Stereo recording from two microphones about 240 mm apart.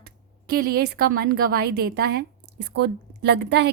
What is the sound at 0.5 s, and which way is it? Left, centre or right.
A woman's voice, right.